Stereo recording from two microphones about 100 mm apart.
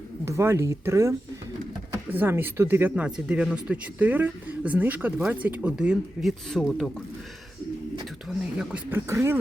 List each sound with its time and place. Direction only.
0.3 s speech: 30° right (ahead or behind); by 6.8 s centre (ahead or behind)
8.3 s speech: 10° right (ahead or behind)
9.0 s speech: 25° right (ahead or behind)